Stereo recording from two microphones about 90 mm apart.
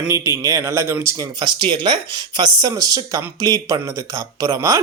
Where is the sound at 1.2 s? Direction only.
55° right (ahead or behind).